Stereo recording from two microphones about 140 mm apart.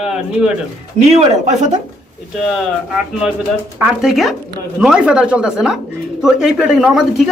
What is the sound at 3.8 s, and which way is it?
Speech, centre (ahead or behind).